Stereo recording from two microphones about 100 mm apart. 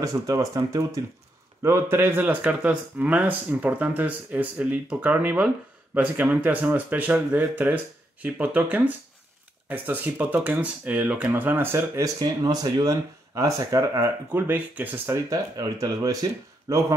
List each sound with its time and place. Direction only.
0.0 s speech: 35° right (ahead or behind)
12.2 s speech: 40° right (ahead or behind)
14.5 s speech: 15° right (ahead or behind); by 16.8 s 35° right (ahead or behind)